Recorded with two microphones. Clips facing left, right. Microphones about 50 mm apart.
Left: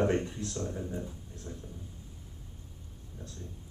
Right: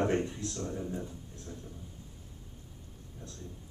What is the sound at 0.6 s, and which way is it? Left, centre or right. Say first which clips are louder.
Speech: right 1 dB; centre.